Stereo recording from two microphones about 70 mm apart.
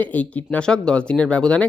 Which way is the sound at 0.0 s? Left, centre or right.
Left.